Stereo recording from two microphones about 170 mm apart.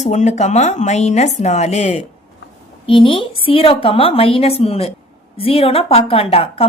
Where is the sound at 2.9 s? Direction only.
30° left (ahead or behind).